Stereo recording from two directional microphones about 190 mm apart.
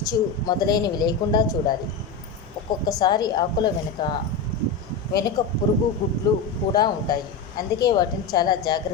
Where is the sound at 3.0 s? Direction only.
20° left (ahead or behind).